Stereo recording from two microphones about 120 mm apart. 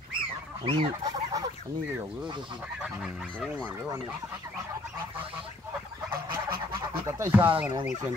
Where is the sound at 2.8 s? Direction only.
10° right (ahead or behind).